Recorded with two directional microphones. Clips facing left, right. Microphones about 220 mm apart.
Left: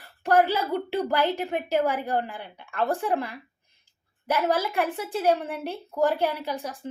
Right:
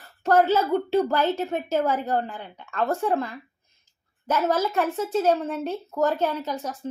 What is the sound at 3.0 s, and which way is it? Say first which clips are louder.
A woman's voice: right 2 dB; 15° left (ahead or behind).